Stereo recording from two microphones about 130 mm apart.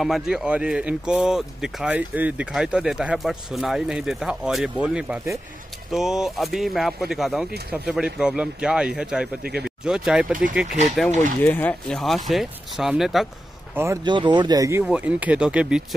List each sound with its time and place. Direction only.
0.0 s speech: 5° right (ahead or behind)
11.4 s speech: 15° left (ahead or behind)
12.3 s speech: centre (ahead or behind)
14.0 s speech: 35° right (ahead or behind)
14.8 s speech: 10° right (ahead or behind)